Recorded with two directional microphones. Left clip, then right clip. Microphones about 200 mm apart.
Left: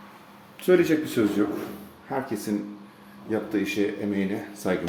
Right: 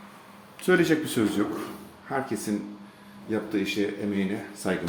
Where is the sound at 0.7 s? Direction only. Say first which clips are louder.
Left 2 dB; 25° right (ahead or behind).